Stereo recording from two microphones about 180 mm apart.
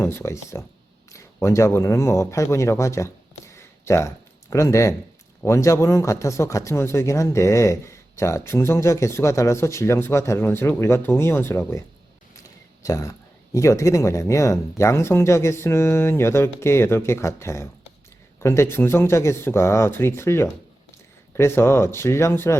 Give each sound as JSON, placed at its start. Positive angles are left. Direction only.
{"t": 0.0, "sound": "speech", "side_deg": 15}
{"t": 12.8, "sound": "speech", "side_deg": 20}